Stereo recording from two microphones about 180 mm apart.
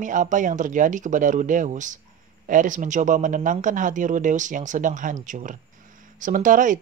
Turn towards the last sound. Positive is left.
turn(degrees=-45)  # may be behind; listen again after turning